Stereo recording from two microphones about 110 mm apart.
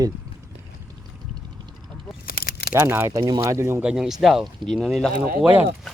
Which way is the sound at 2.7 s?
25° right (ahead or behind).